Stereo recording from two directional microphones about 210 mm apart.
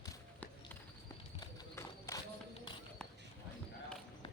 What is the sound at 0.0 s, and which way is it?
Walk, 10° left (ahead or behind).